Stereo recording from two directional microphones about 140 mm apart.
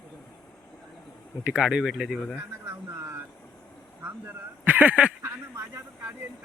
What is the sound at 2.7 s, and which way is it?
Vehicle, 15° right (ahead or behind).